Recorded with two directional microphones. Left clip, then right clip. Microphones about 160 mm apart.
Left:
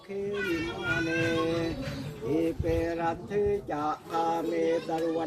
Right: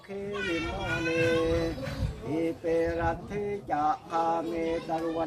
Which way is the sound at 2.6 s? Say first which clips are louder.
Right 1 dB; 20° right (ahead or behind).